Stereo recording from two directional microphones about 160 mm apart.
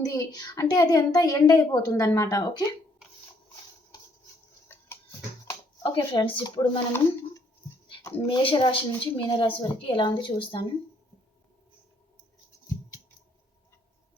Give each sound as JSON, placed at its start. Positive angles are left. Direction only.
{"t": 0.0, "sound": "a woman's voice", "side_deg": 20}
{"t": 5.5, "sound": "speech", "side_deg": 25}
{"t": 8.0, "sound": "a woman's voice", "side_deg": 30}